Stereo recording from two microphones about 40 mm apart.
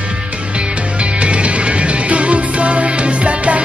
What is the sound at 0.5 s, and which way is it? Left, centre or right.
Music, right.